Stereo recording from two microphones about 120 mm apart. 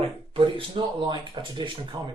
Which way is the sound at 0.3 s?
45° right (ahead or behind).